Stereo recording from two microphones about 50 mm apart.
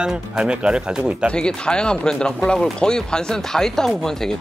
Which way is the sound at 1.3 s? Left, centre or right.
Centre.